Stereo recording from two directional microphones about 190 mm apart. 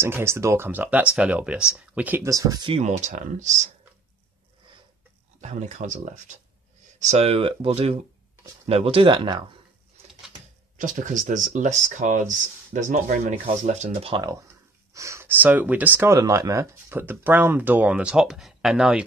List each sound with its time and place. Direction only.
0.0 s speech: 15° right (ahead or behind)
2.8 s speech: 40° right (ahead or behind)
5.4 s speech: 40° right (ahead or behind)
10.8 s speech: 40° right (ahead or behind)
14.1 s speech: 20° right (ahead or behind); by 19.0 s 5° right (ahead or behind)